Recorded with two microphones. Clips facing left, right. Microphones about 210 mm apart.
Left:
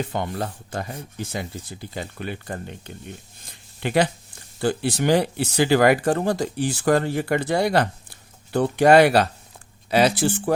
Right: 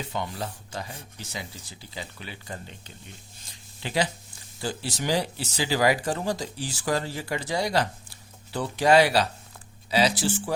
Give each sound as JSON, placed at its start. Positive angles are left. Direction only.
{"t": 0.0, "sound": "speech", "side_deg": 55}